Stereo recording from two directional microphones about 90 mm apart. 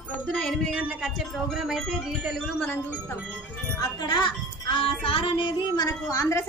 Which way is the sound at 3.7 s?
45° left (ahead or behind).